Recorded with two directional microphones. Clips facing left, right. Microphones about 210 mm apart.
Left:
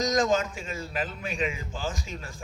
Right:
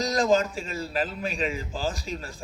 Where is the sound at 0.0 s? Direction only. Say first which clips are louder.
Right 2 dB; 35° right (ahead or behind).